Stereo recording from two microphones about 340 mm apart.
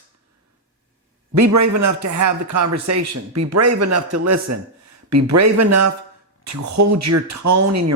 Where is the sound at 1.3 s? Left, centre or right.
Right.